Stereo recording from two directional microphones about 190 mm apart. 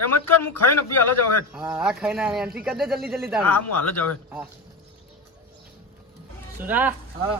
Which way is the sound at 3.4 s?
10° left (ahead or behind).